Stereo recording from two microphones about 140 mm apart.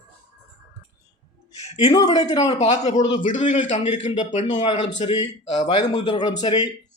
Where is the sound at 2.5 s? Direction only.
55° left (ahead or behind).